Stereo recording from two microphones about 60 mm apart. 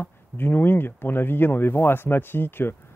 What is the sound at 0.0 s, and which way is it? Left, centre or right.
Speech, left.